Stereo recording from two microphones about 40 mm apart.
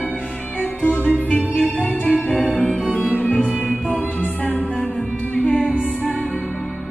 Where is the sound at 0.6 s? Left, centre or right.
Left.